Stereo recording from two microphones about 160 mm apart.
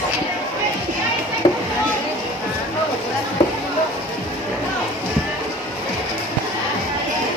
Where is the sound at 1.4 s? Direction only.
35° left (ahead or behind).